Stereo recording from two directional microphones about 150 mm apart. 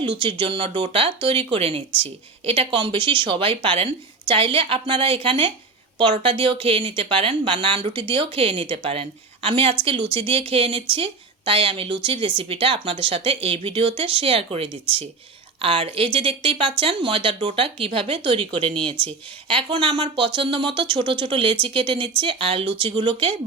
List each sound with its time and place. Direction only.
0.2 s speech: 35° right (ahead or behind)